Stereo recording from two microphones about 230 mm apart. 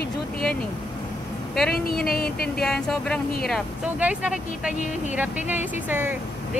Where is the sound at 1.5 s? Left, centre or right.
Centre.